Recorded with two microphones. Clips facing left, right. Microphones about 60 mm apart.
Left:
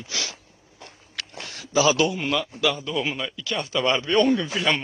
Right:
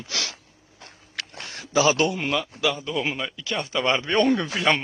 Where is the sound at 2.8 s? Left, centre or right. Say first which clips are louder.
Even; right.